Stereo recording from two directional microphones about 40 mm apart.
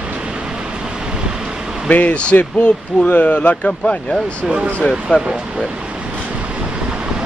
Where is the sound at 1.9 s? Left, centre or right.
Left.